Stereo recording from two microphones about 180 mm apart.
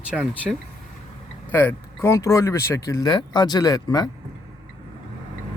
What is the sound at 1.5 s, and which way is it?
Speech, 10° left (ahead or behind).